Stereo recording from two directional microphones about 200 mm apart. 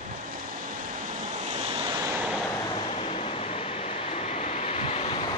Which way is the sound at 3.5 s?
35° left (ahead or behind).